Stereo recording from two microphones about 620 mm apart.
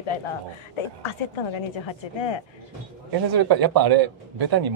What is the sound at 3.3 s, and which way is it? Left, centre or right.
A man's voice, right.